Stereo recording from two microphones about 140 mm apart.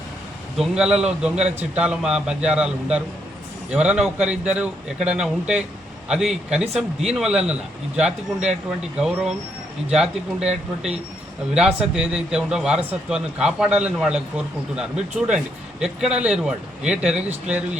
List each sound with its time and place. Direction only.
0.6 s a man's voice: 5° right (ahead or behind)
11.5 s a man's voice: 5° right (ahead or behind)
17.2 s speech: 55° right (ahead or behind)